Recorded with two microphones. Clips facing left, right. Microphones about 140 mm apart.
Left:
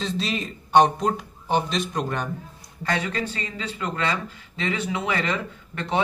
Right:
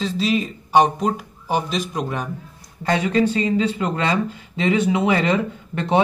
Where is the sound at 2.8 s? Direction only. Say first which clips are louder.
Right 8 dB; 20° right (ahead or behind).